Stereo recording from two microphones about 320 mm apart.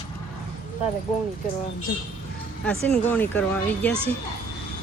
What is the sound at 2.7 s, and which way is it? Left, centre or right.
Speech, centre.